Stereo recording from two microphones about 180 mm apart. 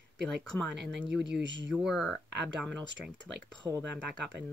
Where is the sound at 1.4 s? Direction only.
75° right (ahead or behind).